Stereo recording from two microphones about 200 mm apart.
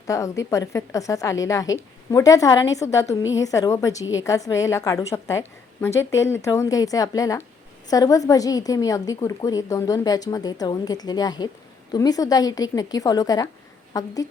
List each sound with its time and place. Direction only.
0.1 s a woman's voice: 15° left (ahead or behind)